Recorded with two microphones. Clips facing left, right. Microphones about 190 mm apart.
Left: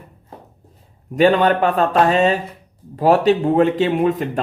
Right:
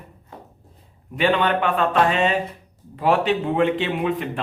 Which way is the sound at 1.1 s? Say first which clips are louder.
Left 6 dB; 40° left (ahead or behind).